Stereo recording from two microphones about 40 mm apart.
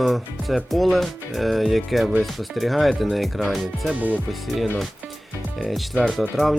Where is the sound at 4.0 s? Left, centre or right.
Right.